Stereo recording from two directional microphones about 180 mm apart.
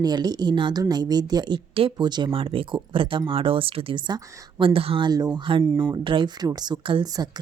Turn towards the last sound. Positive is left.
turn(degrees=-20)  # may be behind; listen again after turning